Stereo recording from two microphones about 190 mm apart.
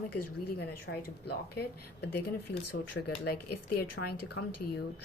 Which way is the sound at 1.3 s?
55° left (ahead or behind).